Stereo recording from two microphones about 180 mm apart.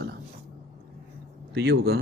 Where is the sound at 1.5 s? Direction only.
65° right (ahead or behind).